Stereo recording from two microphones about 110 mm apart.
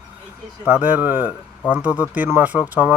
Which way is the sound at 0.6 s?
15° right (ahead or behind).